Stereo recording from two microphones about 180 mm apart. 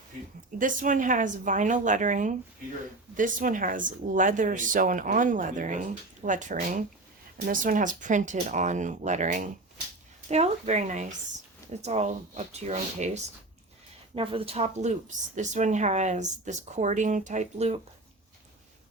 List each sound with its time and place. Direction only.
0.6 s a woman's voice: 45° right (ahead or behind)
14.2 s a woman's voice: 30° right (ahead or behind)